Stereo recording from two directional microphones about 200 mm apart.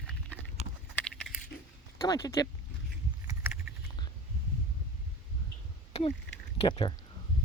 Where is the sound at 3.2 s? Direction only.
10° right (ahead or behind).